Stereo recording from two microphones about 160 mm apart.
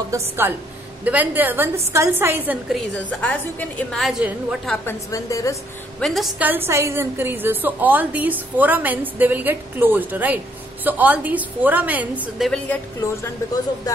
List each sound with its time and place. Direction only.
0.1 s a woman's voice: 15° right (ahead or behind)
3.1 s a woman's voice: 10° left (ahead or behind); by 4.6 s 5° right (ahead or behind)
4.8 s a woman's voice: 20° left (ahead or behind)
5.9 s a woman's voice: centre (ahead or behind)